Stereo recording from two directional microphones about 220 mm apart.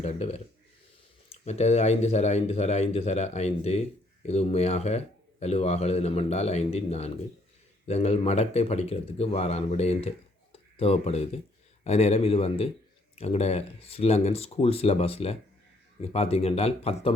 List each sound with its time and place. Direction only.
0.0 s speech: 30° left (ahead or behind)